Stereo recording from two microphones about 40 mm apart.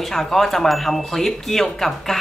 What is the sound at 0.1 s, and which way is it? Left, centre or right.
Speech, centre.